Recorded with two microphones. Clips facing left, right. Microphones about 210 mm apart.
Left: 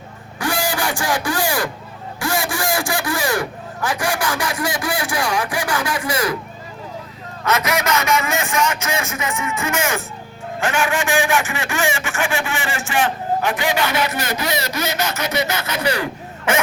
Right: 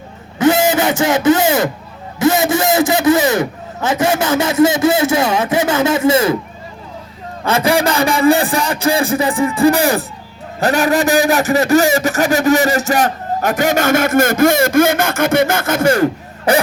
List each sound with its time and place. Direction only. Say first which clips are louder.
0.3 s a sound: right 10 dB; 20° right (ahead or behind)
2.1 s a man's voice: right 10 dB; 20° right (ahead or behind)
7.4 s a man's voice: right 6 dB; 30° right (ahead or behind); by 16.0 s 45° right (ahead or behind)
16.5 s a man's voice: right 6 dB; 35° right (ahead or behind)